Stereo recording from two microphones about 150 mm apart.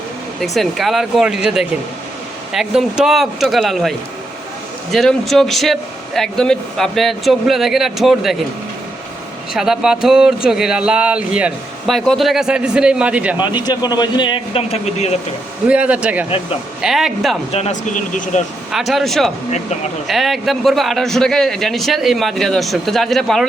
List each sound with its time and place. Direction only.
0.4 s a man's voice: centre (ahead or behind)
9.5 s a man's voice: 5° right (ahead or behind)
13.4 s speech: 30° left (ahead or behind); by 15.1 s 45° left (ahead or behind)
15.6 s a man's voice: 10° right (ahead or behind)
17.5 s speech: 50° left (ahead or behind)
18.7 s a man's voice: centre (ahead or behind)